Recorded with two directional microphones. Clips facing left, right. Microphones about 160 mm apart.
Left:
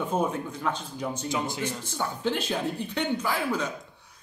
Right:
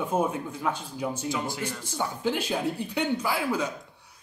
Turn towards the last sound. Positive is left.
turn(degrees=-10)  # may be behind; listen again after turning